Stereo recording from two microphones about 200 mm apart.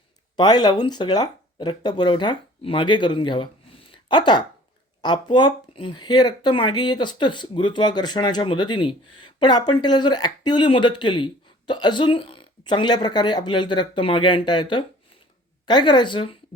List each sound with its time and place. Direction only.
0.3 s speech: 20° left (ahead or behind)